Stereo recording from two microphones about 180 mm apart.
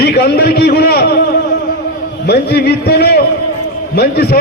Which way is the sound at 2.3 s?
65° left (ahead or behind).